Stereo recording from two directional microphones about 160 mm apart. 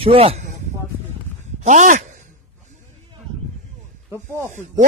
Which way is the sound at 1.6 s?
50° right (ahead or behind).